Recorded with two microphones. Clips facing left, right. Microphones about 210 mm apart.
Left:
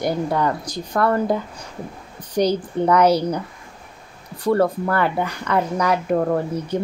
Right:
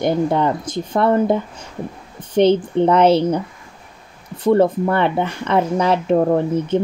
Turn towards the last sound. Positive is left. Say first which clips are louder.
# right 5 dB
turn(degrees=-25)  # may be behind; listen again after turning